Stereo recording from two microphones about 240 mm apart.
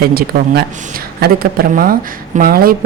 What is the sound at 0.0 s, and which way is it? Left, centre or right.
A woman's voice, right.